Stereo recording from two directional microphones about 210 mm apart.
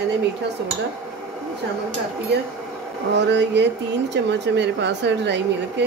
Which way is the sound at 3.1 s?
55° right (ahead or behind).